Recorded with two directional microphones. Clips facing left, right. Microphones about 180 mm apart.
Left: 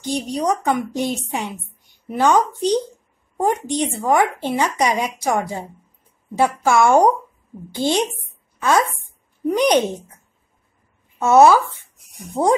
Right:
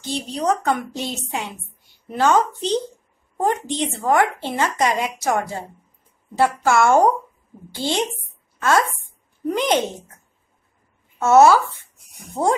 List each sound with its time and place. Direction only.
0.0 s speech: 15° left (ahead or behind)
11.1 s speech: 15° left (ahead or behind)